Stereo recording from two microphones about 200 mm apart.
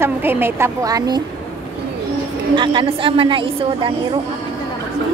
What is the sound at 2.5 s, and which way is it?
A woman's voice, 25° right (ahead or behind).